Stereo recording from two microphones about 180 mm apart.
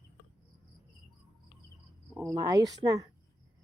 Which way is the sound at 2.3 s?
20° right (ahead or behind).